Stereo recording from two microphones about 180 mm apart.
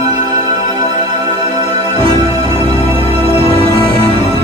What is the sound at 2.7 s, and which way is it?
Music, 30° right (ahead or behind).